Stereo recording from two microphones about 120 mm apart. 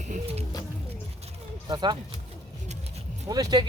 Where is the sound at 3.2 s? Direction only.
35° right (ahead or behind).